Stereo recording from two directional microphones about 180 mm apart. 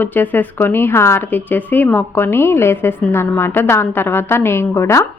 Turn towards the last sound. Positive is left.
turn(degrees=15)  # may be behind; listen again after turning